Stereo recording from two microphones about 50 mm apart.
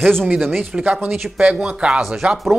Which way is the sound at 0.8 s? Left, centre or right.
Right.